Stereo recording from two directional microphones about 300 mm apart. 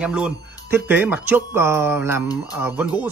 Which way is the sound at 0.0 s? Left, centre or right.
Centre.